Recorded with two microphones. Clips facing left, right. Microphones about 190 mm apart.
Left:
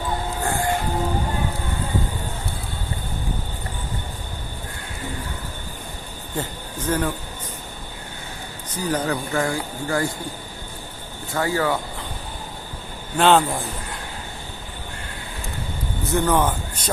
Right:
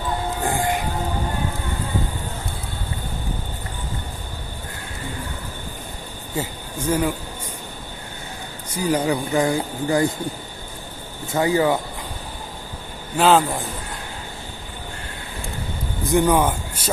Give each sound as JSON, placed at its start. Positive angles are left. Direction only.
{"t": 0.4, "sound": "music", "side_deg": -15}
{"t": 6.3, "sound": "speech", "side_deg": -10}
{"t": 8.7, "sound": "speech", "side_deg": -10}
{"t": 11.3, "sound": "speech", "side_deg": -20}
{"t": 13.1, "sound": "a man's voice", "side_deg": 0}
{"t": 16.0, "sound": "speech", "side_deg": -15}